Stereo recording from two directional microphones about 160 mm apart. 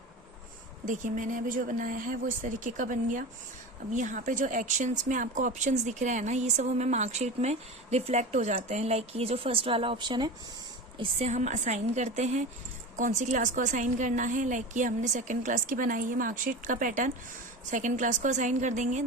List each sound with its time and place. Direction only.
0.9 s speech: 55° right (ahead or behind); by 10.3 s 25° right (ahead or behind)
10.9 s speech: 40° right (ahead or behind)